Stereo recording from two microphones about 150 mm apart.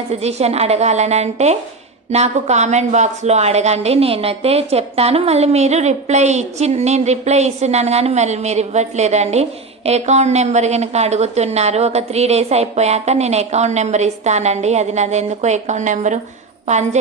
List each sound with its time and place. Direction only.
0.1 s a woman's voice: 45° right (ahead or behind)